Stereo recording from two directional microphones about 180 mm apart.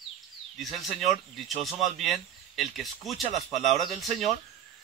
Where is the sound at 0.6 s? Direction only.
Centre (ahead or behind).